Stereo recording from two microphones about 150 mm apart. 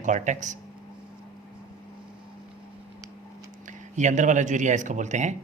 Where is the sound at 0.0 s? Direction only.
55° right (ahead or behind).